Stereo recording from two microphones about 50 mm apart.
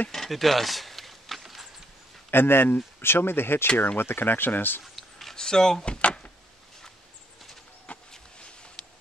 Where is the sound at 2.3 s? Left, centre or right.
Left.